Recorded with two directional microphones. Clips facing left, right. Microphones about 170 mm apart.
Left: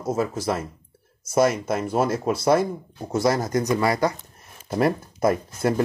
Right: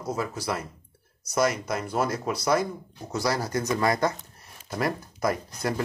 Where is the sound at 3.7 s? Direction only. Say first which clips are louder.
Left 1 dB; 10° left (ahead or behind).